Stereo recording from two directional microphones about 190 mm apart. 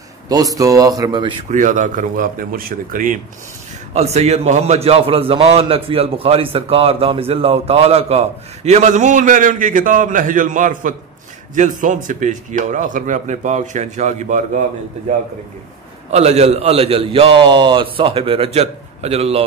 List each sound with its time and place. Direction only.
0.3 s speech: 20° right (ahead or behind)
1.5 s speech: 40° right (ahead or behind)
3.9 s a man's voice: 35° right (ahead or behind)
16.1 s a man's voice: 35° right (ahead or behind)